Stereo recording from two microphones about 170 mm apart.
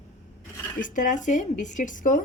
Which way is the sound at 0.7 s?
50° left (ahead or behind).